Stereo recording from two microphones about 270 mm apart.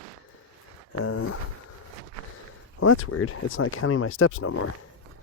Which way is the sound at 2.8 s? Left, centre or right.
Left.